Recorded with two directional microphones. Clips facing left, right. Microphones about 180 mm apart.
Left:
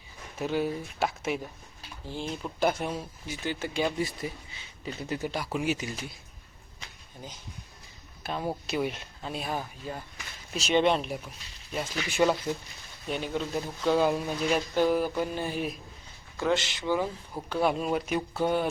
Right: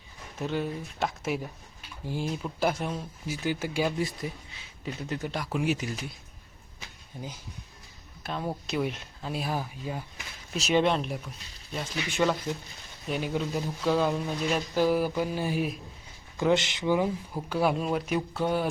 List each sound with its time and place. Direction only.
0.3 s speech: 5° left (ahead or behind)
8.2 s speech: 5° left (ahead or behind)
13.1 s speech: 5° right (ahead or behind)
16.4 s speech: 20° right (ahead or behind)
17.3 s speech: 5° right (ahead or behind)